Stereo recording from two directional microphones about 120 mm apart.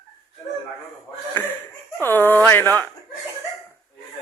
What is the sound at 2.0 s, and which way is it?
Speech, 15° left (ahead or behind).